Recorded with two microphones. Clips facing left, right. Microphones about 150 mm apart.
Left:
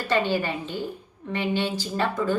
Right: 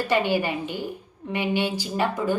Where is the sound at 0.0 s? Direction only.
15° right (ahead or behind).